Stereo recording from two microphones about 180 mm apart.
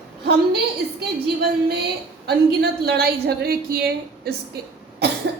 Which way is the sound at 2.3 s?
65° right (ahead or behind).